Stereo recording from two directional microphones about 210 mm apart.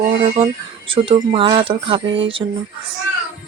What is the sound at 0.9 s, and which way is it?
Speech, 25° right (ahead or behind).